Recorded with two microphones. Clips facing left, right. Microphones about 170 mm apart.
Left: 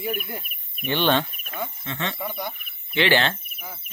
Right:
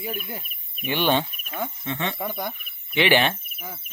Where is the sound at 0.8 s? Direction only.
10° right (ahead or behind).